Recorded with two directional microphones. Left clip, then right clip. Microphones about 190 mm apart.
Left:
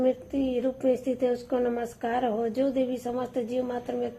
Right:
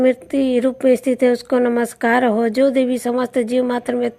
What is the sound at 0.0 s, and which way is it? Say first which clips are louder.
Speech: right 10 dB; 45° right (ahead or behind).